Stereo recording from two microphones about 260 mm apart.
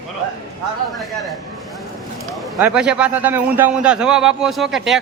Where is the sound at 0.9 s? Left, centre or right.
Centre.